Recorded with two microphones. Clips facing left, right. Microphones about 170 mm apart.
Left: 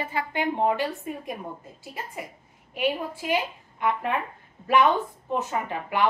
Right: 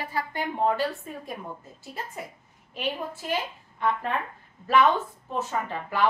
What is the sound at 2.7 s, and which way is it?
Speech, 10° left (ahead or behind).